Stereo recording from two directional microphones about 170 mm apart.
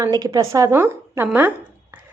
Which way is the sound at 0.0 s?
20° right (ahead or behind).